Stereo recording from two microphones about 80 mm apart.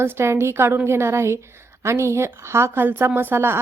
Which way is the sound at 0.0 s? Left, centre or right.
Right.